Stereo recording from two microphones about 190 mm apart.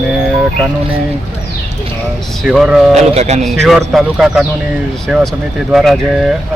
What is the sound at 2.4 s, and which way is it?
Speech, centre (ahead or behind).